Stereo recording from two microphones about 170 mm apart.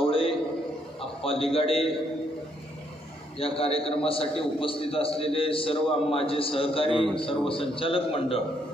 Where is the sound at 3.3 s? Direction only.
35° left (ahead or behind).